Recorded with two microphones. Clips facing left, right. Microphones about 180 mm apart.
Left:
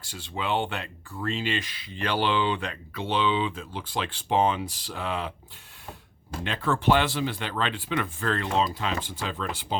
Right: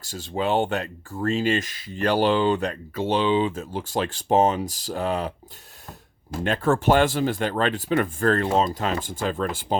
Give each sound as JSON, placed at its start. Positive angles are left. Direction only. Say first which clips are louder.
{"t": 0.0, "sound": "speech", "louder": "right 7 dB", "side_deg": -40}
{"t": 6.4, "sound": "speech", "louder": "right 5 dB", "side_deg": -45}